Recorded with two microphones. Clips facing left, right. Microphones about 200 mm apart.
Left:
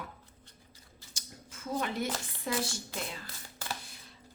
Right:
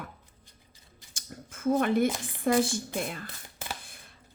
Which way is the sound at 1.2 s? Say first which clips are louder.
Right 6 dB; 55° right (ahead or behind).